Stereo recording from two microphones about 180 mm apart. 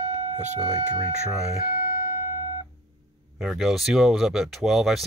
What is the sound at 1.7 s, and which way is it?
Music, 50° left (ahead or behind).